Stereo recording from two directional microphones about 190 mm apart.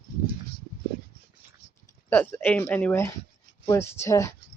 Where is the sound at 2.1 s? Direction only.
10° left (ahead or behind).